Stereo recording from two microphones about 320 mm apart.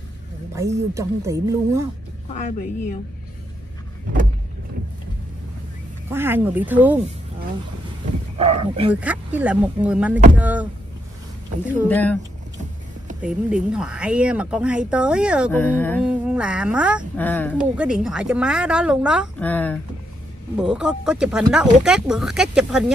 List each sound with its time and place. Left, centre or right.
0.6 s speech: centre
2.3 s a woman's voice: left
6.0 s speech: centre
8.4 s speech: centre
9.0 s speech: centre
11.9 s speech: centre
13.7 s speech: centre